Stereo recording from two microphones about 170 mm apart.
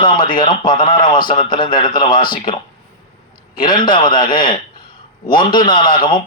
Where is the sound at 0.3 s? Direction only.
25° left (ahead or behind).